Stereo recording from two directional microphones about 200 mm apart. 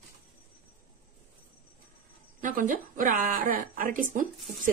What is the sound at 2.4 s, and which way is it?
Speech, 40° right (ahead or behind).